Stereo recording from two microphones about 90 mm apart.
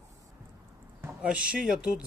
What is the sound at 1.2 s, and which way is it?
Speech, 10° right (ahead or behind).